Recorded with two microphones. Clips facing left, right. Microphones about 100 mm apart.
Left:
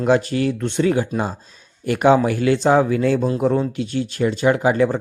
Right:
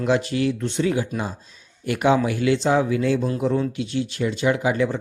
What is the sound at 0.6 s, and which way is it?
Speech, 60° left (ahead or behind).